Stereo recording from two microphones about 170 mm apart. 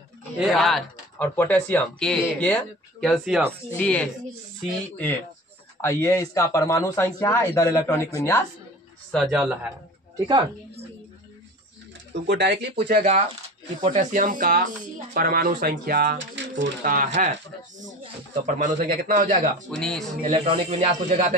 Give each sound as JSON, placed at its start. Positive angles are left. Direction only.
{"t": 0.4, "sound": "speech", "side_deg": 0}
{"t": 1.1, "sound": "speech", "side_deg": 10}
{"t": 5.8, "sound": "speech", "side_deg": 15}
{"t": 9.1, "sound": "speech", "side_deg": 0}
{"t": 10.1, "sound": "a woman's voice", "side_deg": -30}
{"t": 12.1, "sound": "speech", "side_deg": -80}
{"t": 12.7, "sound": "a man's voice", "side_deg": -55}
{"t": 16.8, "sound": "a man's voice", "side_deg": -50}
{"t": 18.4, "sound": "a man's voice", "side_deg": -50}
{"t": 19.8, "sound": "speech", "side_deg": 5}
{"t": 20.2, "sound": "speech", "side_deg": -35}